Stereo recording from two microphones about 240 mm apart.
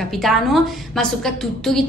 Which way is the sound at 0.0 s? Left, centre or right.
Centre.